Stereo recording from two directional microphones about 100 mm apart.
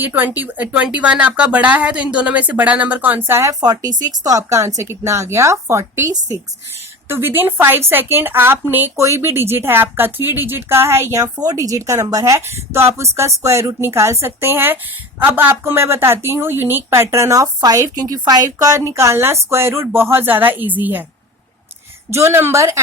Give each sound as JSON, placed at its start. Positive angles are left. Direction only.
{"t": 0.0, "sound": "speech", "side_deg": -20}
{"t": 3.6, "sound": "a woman's voice", "side_deg": -40}
{"t": 7.1, "sound": "a woman's voice", "side_deg": -25}
{"t": 22.1, "sound": "a woman's voice", "side_deg": -25}